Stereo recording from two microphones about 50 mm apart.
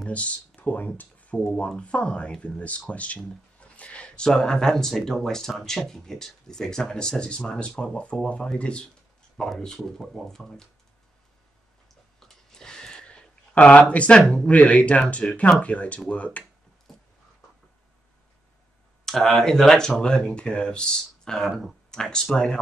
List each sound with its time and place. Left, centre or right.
0.1 s speech: left
3.7 s a sound: left
4.3 s speech: centre
12.2 s a sound: centre
13.6 s speech: left
19.0 s speech: centre